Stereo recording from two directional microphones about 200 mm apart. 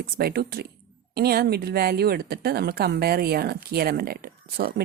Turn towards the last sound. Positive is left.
turn(degrees=-50)  # may be behind; listen again after turning